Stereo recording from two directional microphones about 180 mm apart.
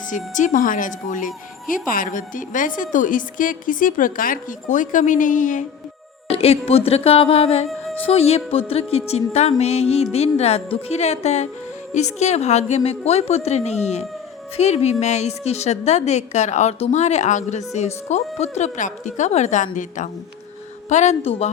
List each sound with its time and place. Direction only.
0.1 s a woman's voice: 45° left (ahead or behind)
6.3 s a woman's voice: 35° left (ahead or behind)